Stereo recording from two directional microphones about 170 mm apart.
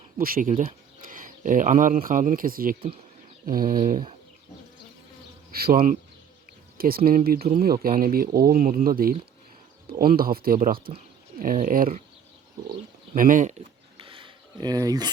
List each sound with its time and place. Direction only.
0.2 s speech: 55° right (ahead or behind)
5.5 s speech: 65° right (ahead or behind)
13.1 s speech: 50° right (ahead or behind)
14.0 s a sound: 30° right (ahead or behind)